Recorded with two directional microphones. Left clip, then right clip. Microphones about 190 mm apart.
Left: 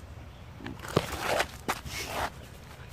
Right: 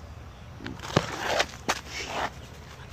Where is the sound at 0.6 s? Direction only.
10° right (ahead or behind).